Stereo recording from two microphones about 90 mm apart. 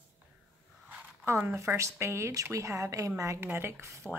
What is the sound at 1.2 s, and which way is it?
A woman's voice, 30° right (ahead or behind).